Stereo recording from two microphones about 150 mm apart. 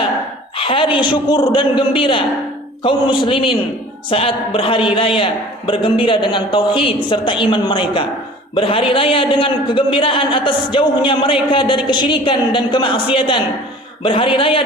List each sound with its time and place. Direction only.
0.5 s a man's voice: 35° left (ahead or behind)